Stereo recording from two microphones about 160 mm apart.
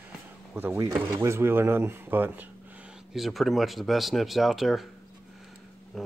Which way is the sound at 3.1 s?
Centre (ahead or behind).